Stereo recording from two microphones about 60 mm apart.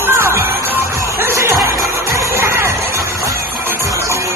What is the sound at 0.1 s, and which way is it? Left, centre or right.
Music, right.